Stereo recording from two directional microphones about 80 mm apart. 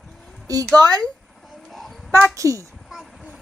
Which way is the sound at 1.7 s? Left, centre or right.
Centre.